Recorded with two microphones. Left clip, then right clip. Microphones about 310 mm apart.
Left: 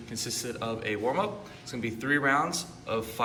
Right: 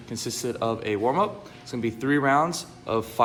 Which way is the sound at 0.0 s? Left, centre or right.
Centre.